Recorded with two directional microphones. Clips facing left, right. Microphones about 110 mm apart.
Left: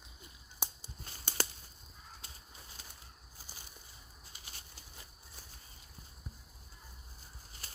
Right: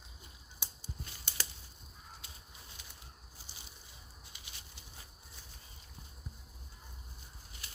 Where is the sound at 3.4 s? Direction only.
45° left (ahead or behind).